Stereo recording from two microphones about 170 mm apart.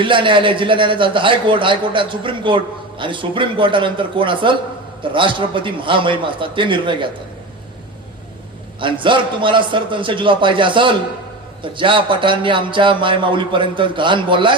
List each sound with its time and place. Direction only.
0.0 s speech: 30° right (ahead or behind)
8.8 s speech: 30° right (ahead or behind)